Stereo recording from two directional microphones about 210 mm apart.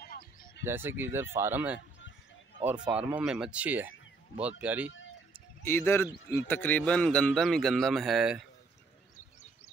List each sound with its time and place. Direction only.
0.0 s music: 45° left (ahead or behind)
0.7 s speech: 10° right (ahead or behind)
5.6 s a man's voice: 10° left (ahead or behind)